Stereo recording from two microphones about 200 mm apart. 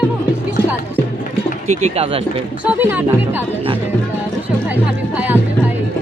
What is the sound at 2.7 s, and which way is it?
Speech, 10° right (ahead or behind).